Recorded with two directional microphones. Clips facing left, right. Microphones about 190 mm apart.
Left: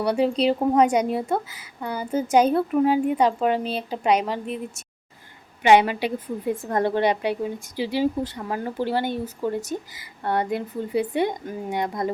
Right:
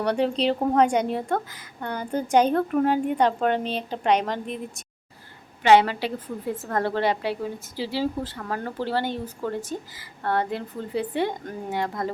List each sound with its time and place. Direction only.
0.0 s a woman's voice: 10° left (ahead or behind)
5.6 s a woman's voice: 15° left (ahead or behind)